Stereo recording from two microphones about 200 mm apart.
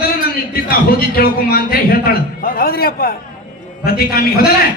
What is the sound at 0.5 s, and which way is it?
A man's voice, 50° left (ahead or behind).